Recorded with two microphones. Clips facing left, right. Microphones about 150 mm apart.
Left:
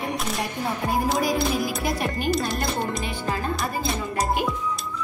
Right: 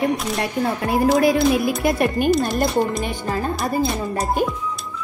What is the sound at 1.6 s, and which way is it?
Speech, 60° right (ahead or behind).